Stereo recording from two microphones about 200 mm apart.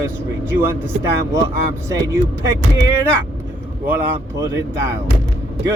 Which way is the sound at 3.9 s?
10° right (ahead or behind).